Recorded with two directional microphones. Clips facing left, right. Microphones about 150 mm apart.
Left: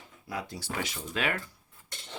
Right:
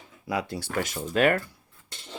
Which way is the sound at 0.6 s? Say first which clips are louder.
Right 6 dB; 50° right (ahead or behind).